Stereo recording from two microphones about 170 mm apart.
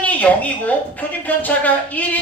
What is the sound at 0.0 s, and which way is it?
A woman's voice, 10° left (ahead or behind).